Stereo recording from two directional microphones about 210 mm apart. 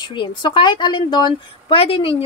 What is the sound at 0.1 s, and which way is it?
A woman's voice, 20° left (ahead or behind).